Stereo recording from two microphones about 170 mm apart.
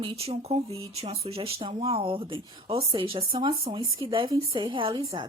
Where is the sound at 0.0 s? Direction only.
35° right (ahead or behind).